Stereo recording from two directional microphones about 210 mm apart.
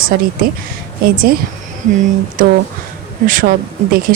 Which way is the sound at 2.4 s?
40° right (ahead or behind).